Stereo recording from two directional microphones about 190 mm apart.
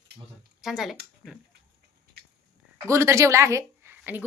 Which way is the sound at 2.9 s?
15° right (ahead or behind).